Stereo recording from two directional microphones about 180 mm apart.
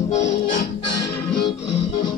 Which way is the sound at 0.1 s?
40° left (ahead or behind).